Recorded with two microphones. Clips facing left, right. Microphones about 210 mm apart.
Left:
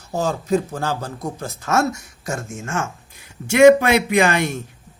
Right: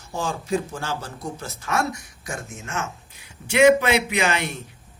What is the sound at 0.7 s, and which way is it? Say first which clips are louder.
A man's voice: left 5 dB; 55° left (ahead or behind).